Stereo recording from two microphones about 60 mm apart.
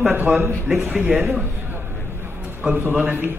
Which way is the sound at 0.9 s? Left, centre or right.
Centre.